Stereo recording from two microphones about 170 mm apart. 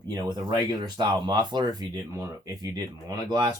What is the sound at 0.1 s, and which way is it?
Speech, 25° right (ahead or behind).